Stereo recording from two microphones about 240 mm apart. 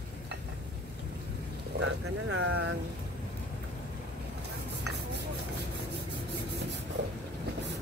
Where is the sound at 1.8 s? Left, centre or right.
Right.